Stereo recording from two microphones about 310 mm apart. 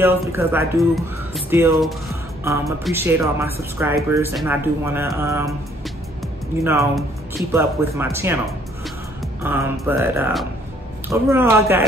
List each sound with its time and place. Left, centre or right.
0.0 s speech: centre
6.6 s speech: centre
9.4 s speech: centre